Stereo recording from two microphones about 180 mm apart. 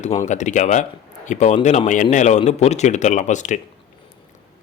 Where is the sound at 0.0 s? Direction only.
40° left (ahead or behind).